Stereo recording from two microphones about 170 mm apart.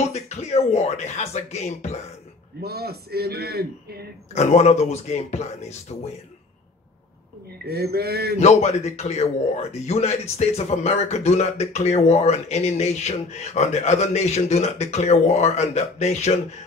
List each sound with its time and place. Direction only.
0.1 s speech: 40° left (ahead or behind)
2.6 s a man's voice: 65° right (ahead or behind)
4.3 s speech: 40° left (ahead or behind)
7.6 s a man's voice: 70° right (ahead or behind)
8.4 s speech: 40° left (ahead or behind)